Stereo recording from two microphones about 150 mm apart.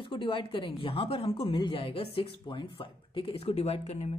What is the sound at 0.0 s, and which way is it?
A woman's voice, 35° left (ahead or behind).